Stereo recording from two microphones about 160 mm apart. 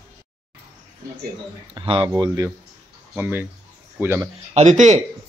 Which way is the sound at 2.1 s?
25° right (ahead or behind).